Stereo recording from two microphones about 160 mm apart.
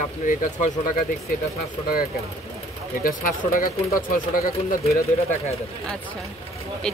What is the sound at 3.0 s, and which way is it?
Speech, 60° left (ahead or behind).